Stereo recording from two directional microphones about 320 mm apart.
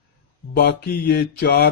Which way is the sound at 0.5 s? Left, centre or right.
Left.